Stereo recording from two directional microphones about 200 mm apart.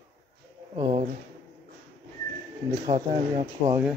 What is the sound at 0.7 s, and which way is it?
Speech, 30° right (ahead or behind).